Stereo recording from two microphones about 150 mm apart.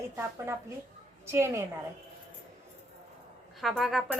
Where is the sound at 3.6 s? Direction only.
Centre (ahead or behind).